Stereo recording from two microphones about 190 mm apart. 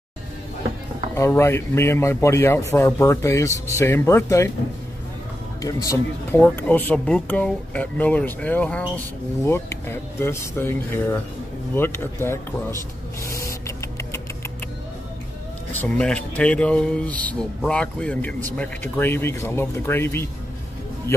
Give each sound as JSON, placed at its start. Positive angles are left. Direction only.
{"t": 1.1, "sound": "speech", "side_deg": 15}
{"t": 5.6, "sound": "speech", "side_deg": 20}
{"t": 13.2, "sound": "printer", "side_deg": 15}
{"t": 15.7, "sound": "a man's voice", "side_deg": 5}